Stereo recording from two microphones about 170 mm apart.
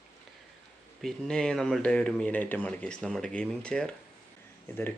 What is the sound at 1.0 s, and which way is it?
Speech, 5° left (ahead or behind).